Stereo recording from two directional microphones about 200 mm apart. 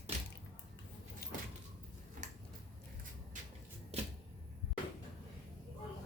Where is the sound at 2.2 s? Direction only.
35° right (ahead or behind).